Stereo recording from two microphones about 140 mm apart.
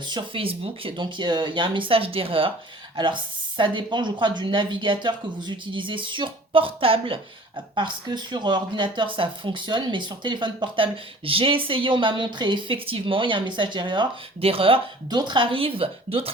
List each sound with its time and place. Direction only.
0.0 s speech: 35° right (ahead or behind)